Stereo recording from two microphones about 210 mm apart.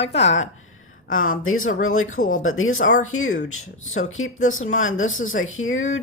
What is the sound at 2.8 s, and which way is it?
Speech, 35° left (ahead or behind).